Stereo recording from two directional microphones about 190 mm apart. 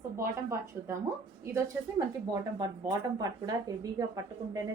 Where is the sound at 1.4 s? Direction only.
15° right (ahead or behind).